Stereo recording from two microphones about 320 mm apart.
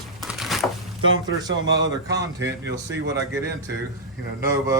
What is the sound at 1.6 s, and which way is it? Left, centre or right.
Speech, right.